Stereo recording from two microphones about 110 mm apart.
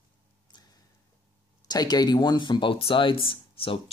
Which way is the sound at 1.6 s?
40° left (ahead or behind).